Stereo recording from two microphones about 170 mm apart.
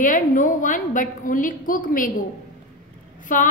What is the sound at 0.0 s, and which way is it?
A woman's voice, 50° left (ahead or behind).